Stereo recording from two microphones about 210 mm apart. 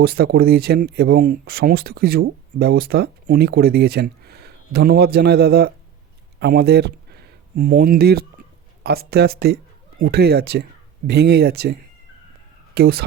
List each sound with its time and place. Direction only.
0.0 s speech: 45° right (ahead or behind)